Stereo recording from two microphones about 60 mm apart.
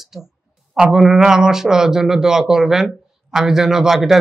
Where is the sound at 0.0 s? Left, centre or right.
Centre.